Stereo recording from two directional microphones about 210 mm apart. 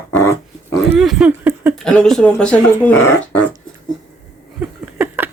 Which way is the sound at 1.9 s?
5° left (ahead or behind).